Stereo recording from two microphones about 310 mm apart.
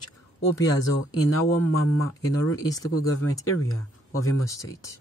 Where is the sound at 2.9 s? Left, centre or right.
Left.